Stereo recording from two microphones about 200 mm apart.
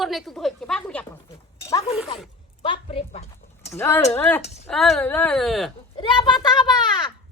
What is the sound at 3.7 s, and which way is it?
Speech, 10° left (ahead or behind).